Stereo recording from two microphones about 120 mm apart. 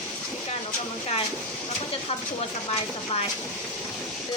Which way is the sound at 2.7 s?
60° left (ahead or behind).